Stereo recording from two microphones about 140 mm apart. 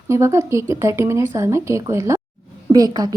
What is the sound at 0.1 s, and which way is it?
A woman's voice, 20° right (ahead or behind).